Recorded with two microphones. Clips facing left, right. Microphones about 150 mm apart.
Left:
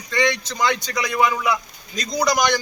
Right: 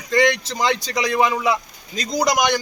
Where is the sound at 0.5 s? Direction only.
30° right (ahead or behind).